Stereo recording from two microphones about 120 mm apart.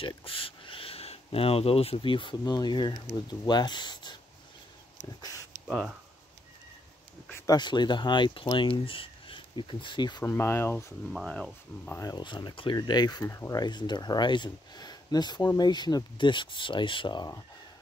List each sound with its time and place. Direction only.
0.0 s speech: 45° left (ahead or behind)
5.7 s speech: 5° left (ahead or behind)
7.4 s speech: 35° left (ahead or behind)
10.2 s speech: 20° left (ahead or behind)
11.1 s speech: 5° left (ahead or behind)
12.0 s speech: 35° left (ahead or behind)